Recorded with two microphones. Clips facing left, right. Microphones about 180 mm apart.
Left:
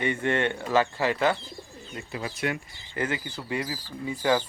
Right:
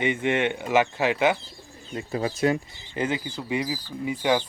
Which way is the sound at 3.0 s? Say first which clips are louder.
Right 3 dB; 20° right (ahead or behind).